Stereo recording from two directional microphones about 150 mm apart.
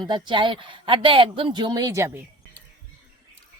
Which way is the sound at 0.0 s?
30° right (ahead or behind).